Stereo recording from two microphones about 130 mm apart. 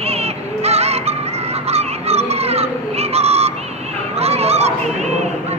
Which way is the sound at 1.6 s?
55° right (ahead or behind).